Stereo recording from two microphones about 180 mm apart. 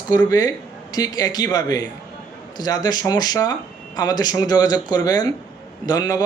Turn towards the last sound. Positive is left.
turn(degrees=20)  # may be behind; listen again after turning